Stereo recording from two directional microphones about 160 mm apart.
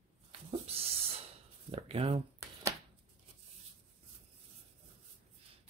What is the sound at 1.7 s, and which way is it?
Speech, 40° right (ahead or behind).